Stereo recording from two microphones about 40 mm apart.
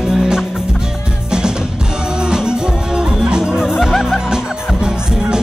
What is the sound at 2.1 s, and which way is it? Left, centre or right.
Music, centre.